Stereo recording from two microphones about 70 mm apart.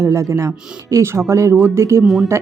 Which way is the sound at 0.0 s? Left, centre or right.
Right.